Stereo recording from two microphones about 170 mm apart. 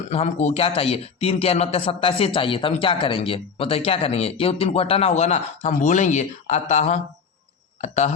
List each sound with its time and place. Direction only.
0.1 s speech: 40° left (ahead or behind)